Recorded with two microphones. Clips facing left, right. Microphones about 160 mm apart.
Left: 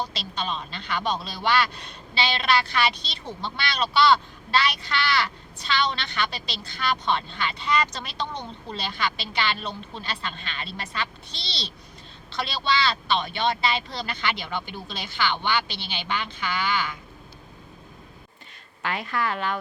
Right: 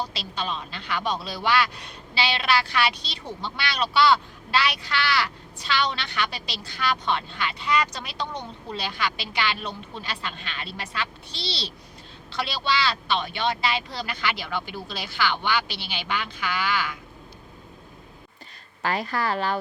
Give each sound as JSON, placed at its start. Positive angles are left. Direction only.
{"t": 0.1, "sound": "speech", "side_deg": -5}
{"t": 18.8, "sound": "a woman's voice", "side_deg": -35}